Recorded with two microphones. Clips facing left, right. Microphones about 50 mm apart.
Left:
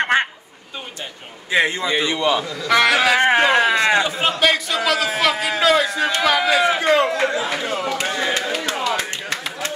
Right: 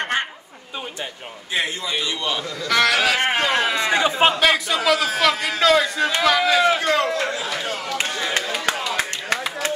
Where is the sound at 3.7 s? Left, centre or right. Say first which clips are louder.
Left 4 dB; left.